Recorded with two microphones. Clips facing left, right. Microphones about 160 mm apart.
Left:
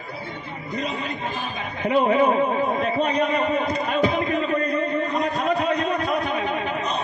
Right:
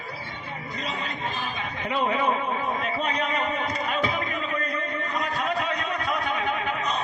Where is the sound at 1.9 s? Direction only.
40° left (ahead or behind).